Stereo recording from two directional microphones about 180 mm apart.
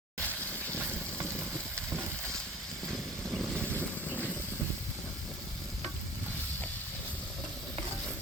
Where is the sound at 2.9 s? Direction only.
Centre (ahead or behind).